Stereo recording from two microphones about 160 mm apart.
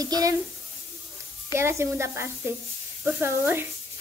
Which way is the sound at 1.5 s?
15° right (ahead or behind).